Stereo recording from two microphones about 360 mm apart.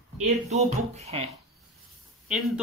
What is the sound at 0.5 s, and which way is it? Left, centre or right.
Speech, centre.